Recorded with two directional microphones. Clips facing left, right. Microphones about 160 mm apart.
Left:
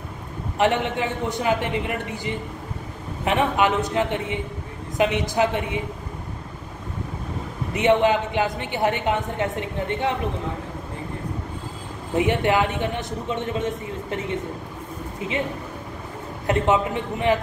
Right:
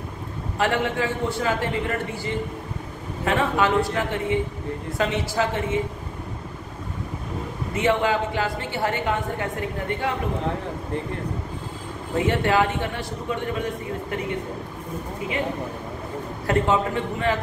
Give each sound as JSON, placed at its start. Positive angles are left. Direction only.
{"t": 0.6, "sound": "a woman's voice", "side_deg": 20}
{"t": 7.7, "sound": "a woman's voice", "side_deg": 20}
{"t": 12.2, "sound": "a woman's voice", "side_deg": 20}
{"t": 16.4, "sound": "a woman's voice", "side_deg": 20}